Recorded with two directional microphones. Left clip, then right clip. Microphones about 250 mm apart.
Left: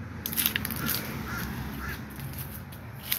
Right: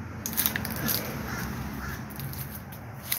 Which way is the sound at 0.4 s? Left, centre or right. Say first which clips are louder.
Left 1 dB; centre.